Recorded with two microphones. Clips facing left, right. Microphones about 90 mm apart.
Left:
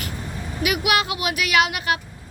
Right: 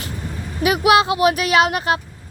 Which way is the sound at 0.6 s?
30° right (ahead or behind).